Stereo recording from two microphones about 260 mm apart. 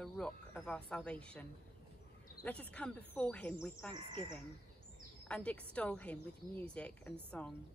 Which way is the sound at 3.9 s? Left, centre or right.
Centre.